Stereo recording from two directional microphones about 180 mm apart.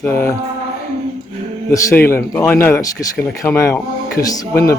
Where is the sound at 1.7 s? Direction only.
15° left (ahead or behind).